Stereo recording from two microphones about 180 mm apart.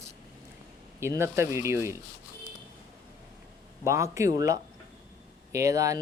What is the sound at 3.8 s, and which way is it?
Speech, 15° right (ahead or behind).